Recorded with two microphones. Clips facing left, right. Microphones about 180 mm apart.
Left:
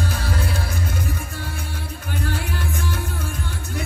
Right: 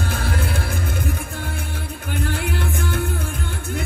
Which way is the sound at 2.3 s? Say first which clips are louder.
Right 3 dB; 55° right (ahead or behind).